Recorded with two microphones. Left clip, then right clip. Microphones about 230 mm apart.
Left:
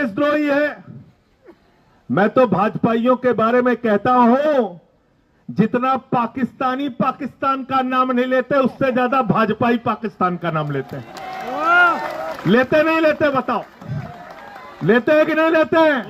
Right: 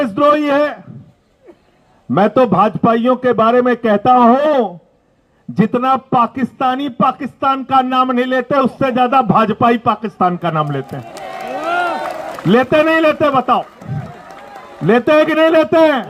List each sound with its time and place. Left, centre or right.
0.2 s a man's voice: right
2.1 s a man's voice: right
5.5 s a man's voice: right
11.7 s run: left
12.5 s a man's voice: right
14.8 s a man's voice: right